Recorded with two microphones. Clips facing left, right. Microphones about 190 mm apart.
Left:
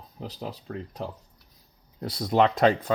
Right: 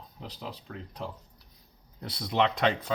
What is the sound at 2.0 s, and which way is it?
Speech, 40° left (ahead or behind).